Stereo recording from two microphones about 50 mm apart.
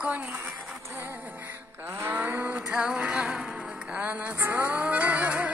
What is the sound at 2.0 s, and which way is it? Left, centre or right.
Moo, right.